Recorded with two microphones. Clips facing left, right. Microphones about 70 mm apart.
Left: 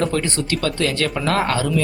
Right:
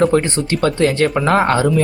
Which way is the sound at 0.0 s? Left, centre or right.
Right.